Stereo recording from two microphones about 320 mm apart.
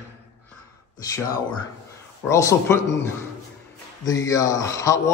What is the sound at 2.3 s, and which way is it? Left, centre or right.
A man's voice, centre.